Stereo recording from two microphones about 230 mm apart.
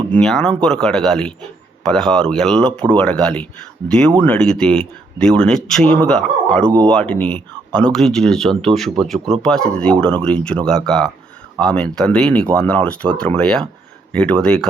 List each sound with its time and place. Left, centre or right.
0.1 s speech: centre